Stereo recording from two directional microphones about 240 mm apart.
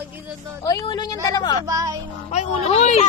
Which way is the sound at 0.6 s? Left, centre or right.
Centre.